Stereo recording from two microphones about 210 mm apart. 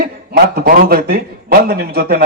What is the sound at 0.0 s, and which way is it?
A man's voice, 45° right (ahead or behind).